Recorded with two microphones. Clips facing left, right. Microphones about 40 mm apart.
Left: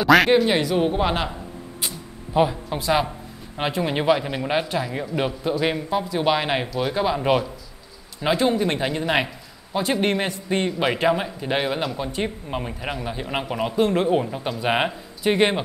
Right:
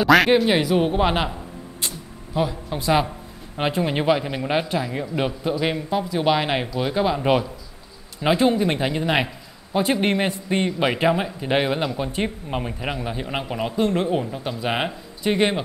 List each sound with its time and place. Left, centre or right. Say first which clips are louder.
0.0 s speech: even; centre
2.3 s speech: left 4 dB; left
2.7 s a man's voice: right 1 dB; centre